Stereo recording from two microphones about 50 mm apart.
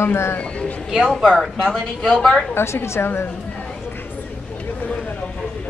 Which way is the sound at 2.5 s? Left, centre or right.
Left.